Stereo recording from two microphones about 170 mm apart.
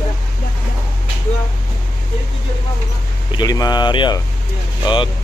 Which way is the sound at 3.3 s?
25° left (ahead or behind).